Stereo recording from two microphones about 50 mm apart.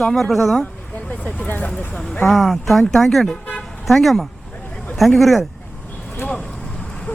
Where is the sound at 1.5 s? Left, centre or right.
Left.